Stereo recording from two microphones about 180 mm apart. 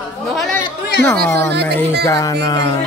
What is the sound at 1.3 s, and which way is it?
Speech, 15° left (ahead or behind).